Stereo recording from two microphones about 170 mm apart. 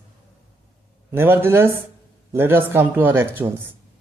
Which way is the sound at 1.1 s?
15° right (ahead or behind).